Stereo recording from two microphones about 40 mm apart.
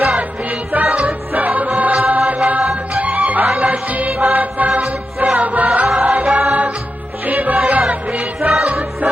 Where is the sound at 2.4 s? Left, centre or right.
Right.